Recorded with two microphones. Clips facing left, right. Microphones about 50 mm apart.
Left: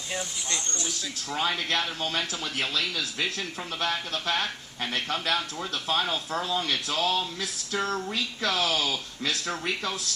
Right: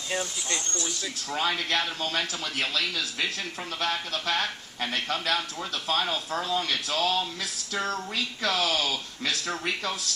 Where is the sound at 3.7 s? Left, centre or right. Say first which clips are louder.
Even; centre.